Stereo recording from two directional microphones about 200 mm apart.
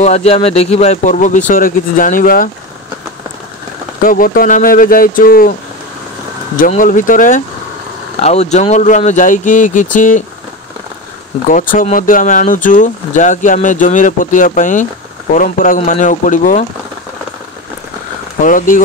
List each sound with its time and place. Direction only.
0.0 s speech: 30° left (ahead or behind)
4.0 s speech: 45° left (ahead or behind)
6.5 s speech: 40° left (ahead or behind)
11.5 s speech: 40° left (ahead or behind)
18.4 s speech: 40° left (ahead or behind)